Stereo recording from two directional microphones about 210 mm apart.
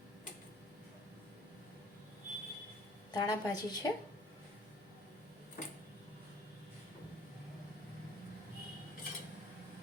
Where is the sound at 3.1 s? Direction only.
20° left (ahead or behind).